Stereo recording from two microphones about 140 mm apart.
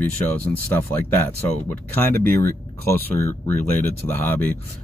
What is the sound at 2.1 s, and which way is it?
Speech, 90° right.